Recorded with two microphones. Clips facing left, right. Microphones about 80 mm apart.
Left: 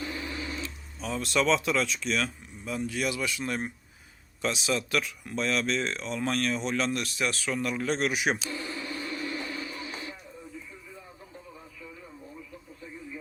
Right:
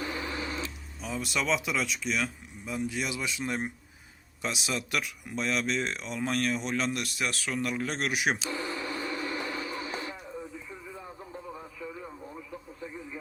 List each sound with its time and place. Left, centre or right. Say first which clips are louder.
0.0 s printer: right 1 dB; right
0.6 s speech: left 1 dB; centre
8.4 s a sound: right 2 dB; right